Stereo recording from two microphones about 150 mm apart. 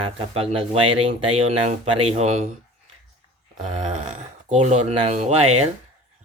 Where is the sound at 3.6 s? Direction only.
50° right (ahead or behind).